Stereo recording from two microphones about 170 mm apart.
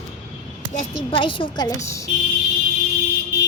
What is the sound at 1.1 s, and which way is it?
Speech, 30° left (ahead or behind).